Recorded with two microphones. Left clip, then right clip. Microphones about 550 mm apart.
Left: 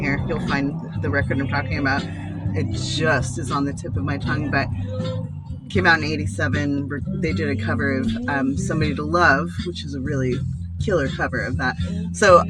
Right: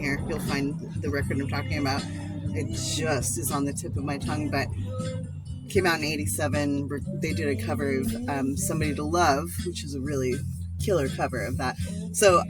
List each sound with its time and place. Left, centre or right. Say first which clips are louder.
0.0 s music: left 5 dB; right
1.0 s speech: left 7 dB; right
5.7 s speech: left 7 dB; right
10.8 s speech: left 4 dB; right